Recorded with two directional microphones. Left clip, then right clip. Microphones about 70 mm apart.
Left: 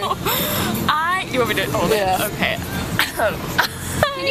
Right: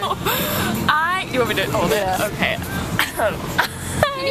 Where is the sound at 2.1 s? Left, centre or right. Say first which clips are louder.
Even; centre.